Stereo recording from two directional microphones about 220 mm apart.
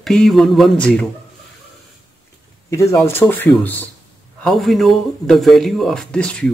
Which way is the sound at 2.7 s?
15° left (ahead or behind).